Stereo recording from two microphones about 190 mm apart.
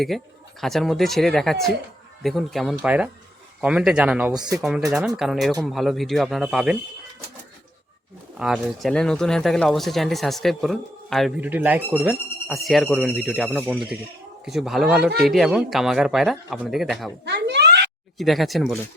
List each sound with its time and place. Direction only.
0.1 s speech: centre (ahead or behind)
4.4 s speech: 20° right (ahead or behind)
4.9 s speech: centre (ahead or behind)
8.4 s speech: centre (ahead or behind)
11.4 s speech: 10° right (ahead or behind)
17.2 s a sound: 65° right (ahead or behind)
18.2 s speech: centre (ahead or behind)